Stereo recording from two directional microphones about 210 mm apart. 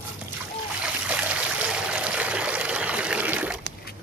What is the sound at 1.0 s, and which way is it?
Stream, 5° right (ahead or behind).